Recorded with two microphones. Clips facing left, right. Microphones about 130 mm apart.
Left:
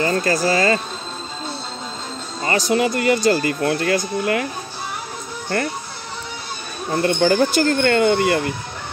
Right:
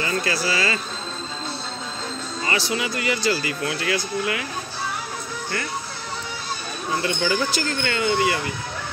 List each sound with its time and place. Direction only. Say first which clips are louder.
0.0 s speech: left 6 dB; 45° left (ahead or behind)
2.4 s speech: left 7 dB; 45° left (ahead or behind)
6.9 s speech: left 6 dB; 45° left (ahead or behind)